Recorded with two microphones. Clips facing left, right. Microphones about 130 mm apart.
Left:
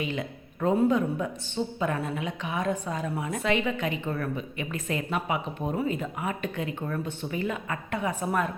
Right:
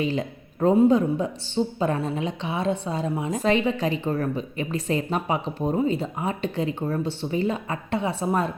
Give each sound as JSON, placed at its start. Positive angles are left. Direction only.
{"t": 0.0, "sound": "a man's voice", "side_deg": -35}